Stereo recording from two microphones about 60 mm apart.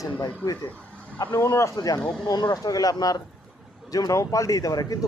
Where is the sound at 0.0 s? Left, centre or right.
Left.